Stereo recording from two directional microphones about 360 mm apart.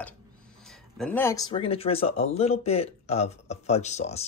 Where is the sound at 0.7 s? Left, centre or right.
Centre.